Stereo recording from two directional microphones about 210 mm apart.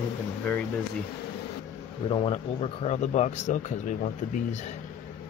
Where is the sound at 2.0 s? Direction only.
25° left (ahead or behind).